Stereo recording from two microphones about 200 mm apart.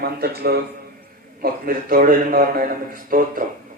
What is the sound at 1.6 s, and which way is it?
Speech, 45° right (ahead or behind).